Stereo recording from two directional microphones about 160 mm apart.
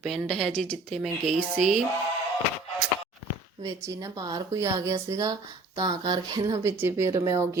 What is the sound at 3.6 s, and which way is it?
Speech, 20° right (ahead or behind).